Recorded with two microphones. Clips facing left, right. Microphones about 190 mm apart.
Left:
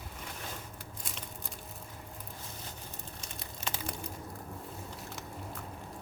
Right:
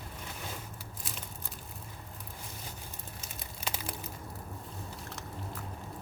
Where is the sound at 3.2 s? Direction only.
5° right (ahead or behind).